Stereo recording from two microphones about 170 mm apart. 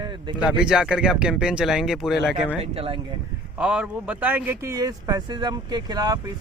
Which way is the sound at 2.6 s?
35° right (ahead or behind).